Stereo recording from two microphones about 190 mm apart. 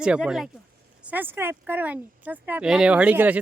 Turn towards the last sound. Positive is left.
turn(degrees=-10)  # may be behind; listen again after turning